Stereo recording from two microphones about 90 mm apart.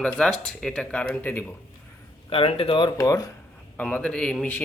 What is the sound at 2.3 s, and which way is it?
Speech, 90° left.